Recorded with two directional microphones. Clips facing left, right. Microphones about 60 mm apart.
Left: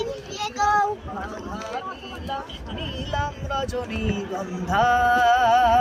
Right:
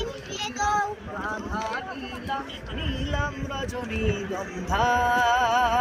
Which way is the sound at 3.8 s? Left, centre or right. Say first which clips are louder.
Even; centre.